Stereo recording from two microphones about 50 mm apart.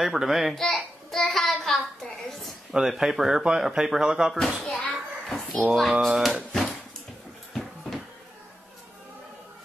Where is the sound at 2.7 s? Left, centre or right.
Centre.